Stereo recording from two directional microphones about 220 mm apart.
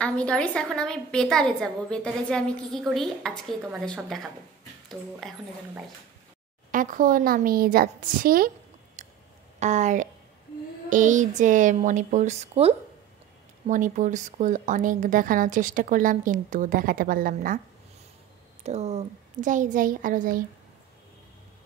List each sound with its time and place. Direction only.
0.0 s a woman's voice: 5° left (ahead or behind)
6.7 s speech: 35° right (ahead or behind)
9.0 s a sound: 35° right (ahead or behind)
9.6 s speech: 30° right (ahead or behind)
18.6 s speech: 30° right (ahead or behind)